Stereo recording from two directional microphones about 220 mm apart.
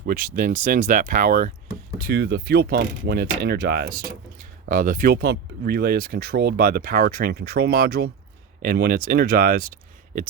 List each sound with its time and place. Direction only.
0.0 s speech: 40° right (ahead or behind)